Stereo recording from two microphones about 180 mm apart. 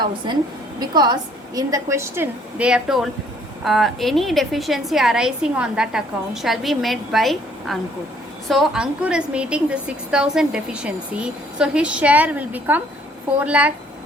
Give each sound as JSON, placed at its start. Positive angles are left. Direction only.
{"t": 0.8, "sound": "a woman's voice", "side_deg": -25}